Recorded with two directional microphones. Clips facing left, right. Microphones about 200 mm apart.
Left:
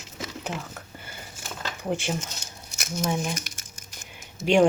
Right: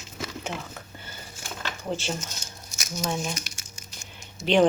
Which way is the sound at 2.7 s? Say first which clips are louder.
Left 3 dB; 60° left (ahead or behind).